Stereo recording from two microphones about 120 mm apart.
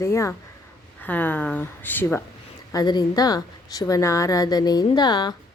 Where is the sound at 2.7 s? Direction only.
35° left (ahead or behind).